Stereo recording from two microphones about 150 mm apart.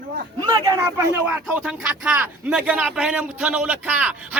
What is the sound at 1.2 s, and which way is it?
Speech, 5° right (ahead or behind).